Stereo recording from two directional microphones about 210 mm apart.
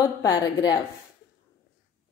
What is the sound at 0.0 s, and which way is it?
Speech, 15° left (ahead or behind).